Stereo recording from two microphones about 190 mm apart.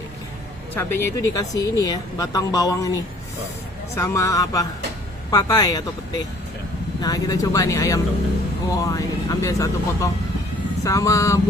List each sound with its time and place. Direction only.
0.7 s speech: 10° left (ahead or behind)